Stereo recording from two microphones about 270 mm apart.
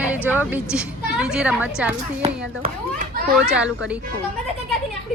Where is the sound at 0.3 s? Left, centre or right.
Centre.